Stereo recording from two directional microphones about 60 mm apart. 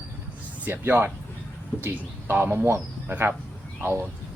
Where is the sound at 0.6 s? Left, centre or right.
Right.